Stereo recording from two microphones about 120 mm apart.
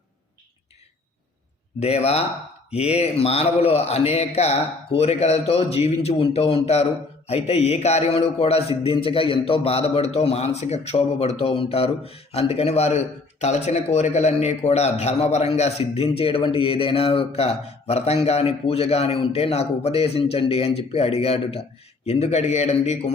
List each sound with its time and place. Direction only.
1.8 s a man's voice: 60° left (ahead or behind)